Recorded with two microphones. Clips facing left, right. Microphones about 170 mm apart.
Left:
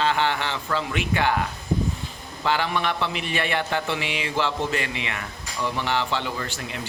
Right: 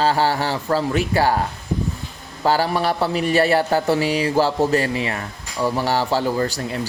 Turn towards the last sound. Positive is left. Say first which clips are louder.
# right 10 dB
turn(degrees=-40)  # may be behind; listen again after turning